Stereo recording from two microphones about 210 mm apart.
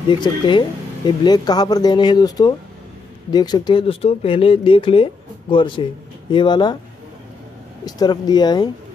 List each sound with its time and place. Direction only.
0.2 s speech: 20° left (ahead or behind)
7.8 s speech: 20° left (ahead or behind)